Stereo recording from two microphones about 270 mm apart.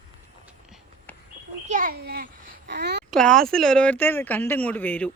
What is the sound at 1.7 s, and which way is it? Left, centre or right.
A child's voice, right.